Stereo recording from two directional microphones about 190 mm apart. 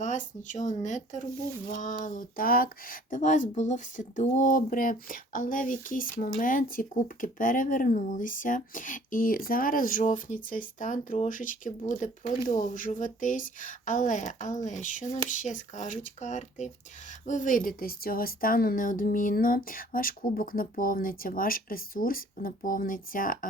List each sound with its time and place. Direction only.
0.0 s speech: 40° left (ahead or behind)